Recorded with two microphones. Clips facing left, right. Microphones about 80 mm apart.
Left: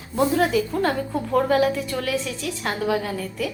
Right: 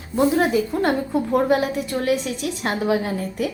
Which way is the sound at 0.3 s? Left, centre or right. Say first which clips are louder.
Right 1 dB; right.